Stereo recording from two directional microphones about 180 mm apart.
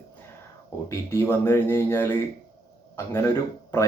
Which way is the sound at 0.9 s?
15° left (ahead or behind).